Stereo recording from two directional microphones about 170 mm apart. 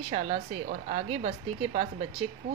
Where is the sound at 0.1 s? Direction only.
45° right (ahead or behind).